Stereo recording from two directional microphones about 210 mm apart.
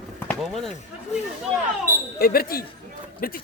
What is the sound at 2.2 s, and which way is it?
Speech, 45° left (ahead or behind).